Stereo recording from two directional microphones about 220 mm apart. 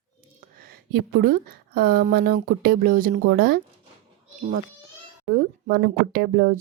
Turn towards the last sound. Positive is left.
turn(degrees=-45)  # may be behind; listen again after turning